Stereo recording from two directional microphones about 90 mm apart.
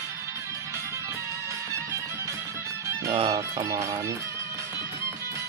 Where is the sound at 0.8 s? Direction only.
35° right (ahead or behind).